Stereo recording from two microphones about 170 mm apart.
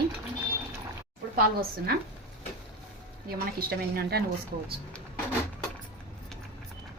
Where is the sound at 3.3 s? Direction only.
65° right (ahead or behind).